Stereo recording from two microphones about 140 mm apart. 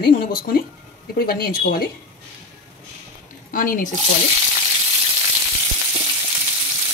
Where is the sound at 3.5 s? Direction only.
70° left (ahead or behind).